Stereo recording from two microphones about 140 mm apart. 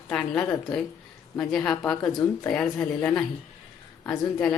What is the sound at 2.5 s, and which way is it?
Speech, 5° left (ahead or behind).